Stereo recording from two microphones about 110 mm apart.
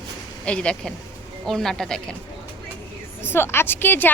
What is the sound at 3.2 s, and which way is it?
Speech, 20° left (ahead or behind).